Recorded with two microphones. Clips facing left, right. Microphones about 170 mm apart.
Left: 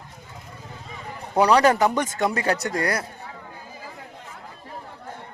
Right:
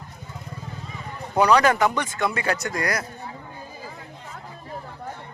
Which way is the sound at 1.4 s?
30° left (ahead or behind).